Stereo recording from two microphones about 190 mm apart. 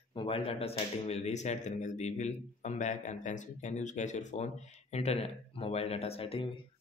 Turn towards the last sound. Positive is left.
turn(degrees=30)  # may be behind; listen again after turning